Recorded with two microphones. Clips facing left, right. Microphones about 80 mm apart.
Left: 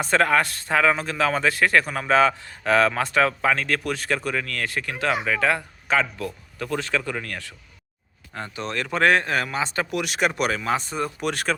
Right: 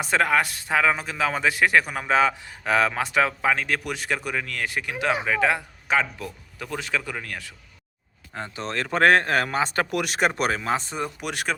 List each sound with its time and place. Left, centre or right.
0.0 s speech: centre
8.5 s speech: right; by 11.5 s centre